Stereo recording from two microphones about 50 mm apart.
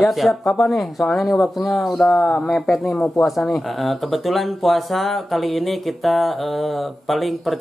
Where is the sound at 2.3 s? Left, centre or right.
Centre.